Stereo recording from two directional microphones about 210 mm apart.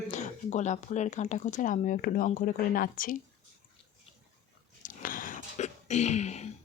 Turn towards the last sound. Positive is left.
turn(degrees=30)  # may be behind; listen again after turning